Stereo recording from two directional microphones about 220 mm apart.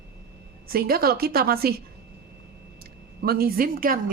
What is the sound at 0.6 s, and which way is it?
Speech, 45° right (ahead or behind).